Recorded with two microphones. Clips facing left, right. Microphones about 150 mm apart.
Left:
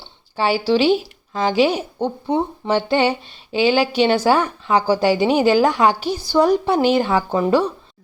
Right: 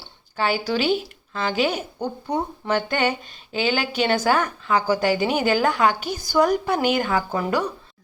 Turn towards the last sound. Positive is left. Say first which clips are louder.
# left 6 dB
turn(degrees=30)  # may be behind; listen again after turning